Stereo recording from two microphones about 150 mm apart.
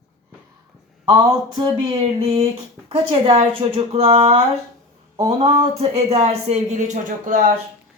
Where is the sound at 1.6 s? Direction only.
40° right (ahead or behind).